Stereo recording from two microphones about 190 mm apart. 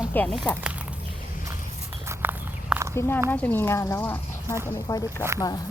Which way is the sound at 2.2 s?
10° right (ahead or behind).